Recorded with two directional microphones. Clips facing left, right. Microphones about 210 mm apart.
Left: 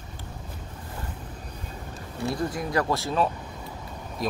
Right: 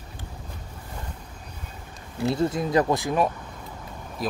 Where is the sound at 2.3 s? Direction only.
25° right (ahead or behind).